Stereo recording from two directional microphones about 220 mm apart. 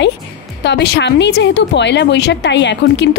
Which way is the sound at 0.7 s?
50° left (ahead or behind).